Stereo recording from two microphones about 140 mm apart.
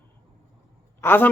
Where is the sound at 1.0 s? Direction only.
15° left (ahead or behind).